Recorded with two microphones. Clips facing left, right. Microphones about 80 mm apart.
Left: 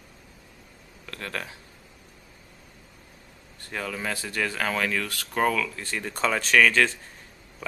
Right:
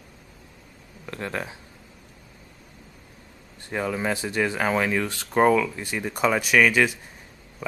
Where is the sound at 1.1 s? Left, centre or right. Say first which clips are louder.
Right 4 dB; right.